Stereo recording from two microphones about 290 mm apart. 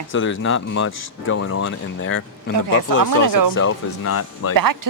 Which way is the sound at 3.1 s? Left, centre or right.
Right.